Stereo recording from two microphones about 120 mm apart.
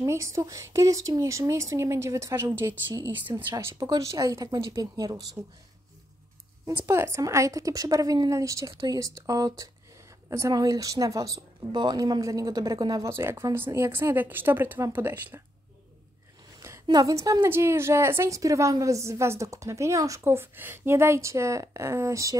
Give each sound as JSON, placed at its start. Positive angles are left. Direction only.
{"t": 0.0, "sound": "a woman's voice", "side_deg": -25}
{"t": 6.7, "sound": "a woman's voice", "side_deg": -20}
{"t": 13.1, "sound": "a woman's voice", "side_deg": -20}
{"t": 16.5, "sound": "a sound", "side_deg": -25}
{"t": 16.8, "sound": "a woman's voice", "side_deg": -30}